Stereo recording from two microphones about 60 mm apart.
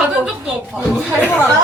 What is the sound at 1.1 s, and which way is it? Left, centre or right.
Speech, left.